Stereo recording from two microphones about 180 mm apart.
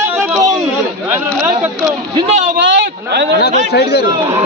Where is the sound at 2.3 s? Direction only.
45° right (ahead or behind).